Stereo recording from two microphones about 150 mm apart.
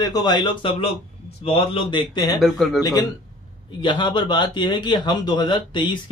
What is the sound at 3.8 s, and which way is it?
A man's voice, 30° left (ahead or behind).